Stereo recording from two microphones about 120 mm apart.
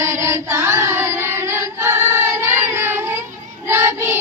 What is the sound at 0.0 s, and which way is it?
Chant, 25° right (ahead or behind).